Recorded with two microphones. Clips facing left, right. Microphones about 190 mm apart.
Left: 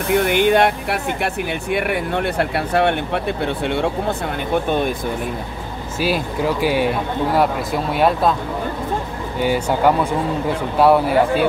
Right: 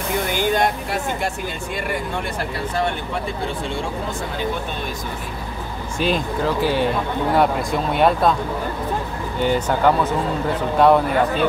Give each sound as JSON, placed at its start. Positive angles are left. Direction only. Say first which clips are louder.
{"t": 0.1, "sound": "speech", "louder": "left 6 dB", "side_deg": 65}
{"t": 4.6, "sound": "speech", "louder": "left 9 dB", "side_deg": 55}
{"t": 5.9, "sound": "speech", "louder": "left 1 dB", "side_deg": 5}
{"t": 9.4, "sound": "speech", "louder": "left 1 dB", "side_deg": 10}